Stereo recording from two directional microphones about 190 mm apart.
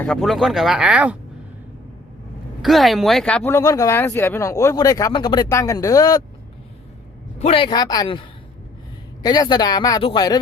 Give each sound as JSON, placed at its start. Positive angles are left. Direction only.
{"t": 0.0, "sound": "speech", "side_deg": 0}
{"t": 2.6, "sound": "speech", "side_deg": 0}
{"t": 7.3, "sound": "speech", "side_deg": 30}